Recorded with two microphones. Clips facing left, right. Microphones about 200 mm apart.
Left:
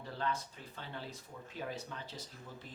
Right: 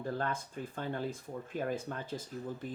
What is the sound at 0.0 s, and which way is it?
Speech, 50° right (ahead or behind).